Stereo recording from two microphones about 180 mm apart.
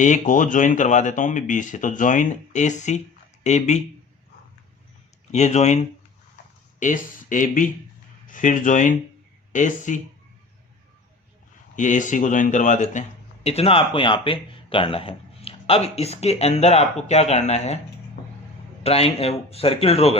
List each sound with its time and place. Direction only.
0.0 s speech: 45° left (ahead or behind)
5.3 s speech: 40° left (ahead or behind)
11.8 s speech: 45° left (ahead or behind)
18.8 s speech: 35° left (ahead or behind)